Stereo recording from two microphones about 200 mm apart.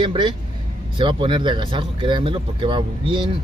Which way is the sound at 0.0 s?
25° right (ahead or behind).